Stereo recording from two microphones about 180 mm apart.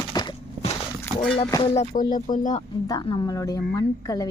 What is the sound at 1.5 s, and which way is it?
Speech, 30° left (ahead or behind).